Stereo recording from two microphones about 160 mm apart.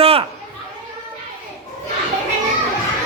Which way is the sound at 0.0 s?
35° right (ahead or behind).